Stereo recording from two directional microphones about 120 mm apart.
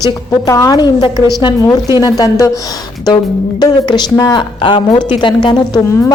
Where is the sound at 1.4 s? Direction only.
35° left (ahead or behind).